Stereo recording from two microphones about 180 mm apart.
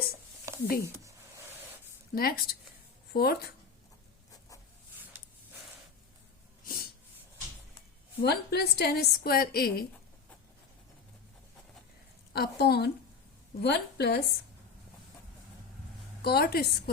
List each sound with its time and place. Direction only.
0.5 s a sound: 15° right (ahead or behind)
2.1 s a woman's voice: 55° left (ahead or behind)
4.3 s a sound: 20° left (ahead or behind)
8.2 s a woman's voice: 65° left (ahead or behind)
12.3 s a woman's voice: 60° left (ahead or behind)
16.2 s a woman's voice: 60° left (ahead or behind)